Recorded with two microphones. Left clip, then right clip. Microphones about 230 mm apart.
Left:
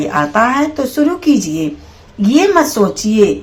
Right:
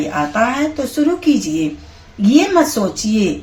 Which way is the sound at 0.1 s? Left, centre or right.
Centre.